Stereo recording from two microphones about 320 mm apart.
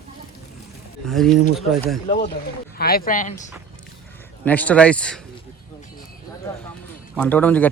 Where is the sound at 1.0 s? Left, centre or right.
Centre.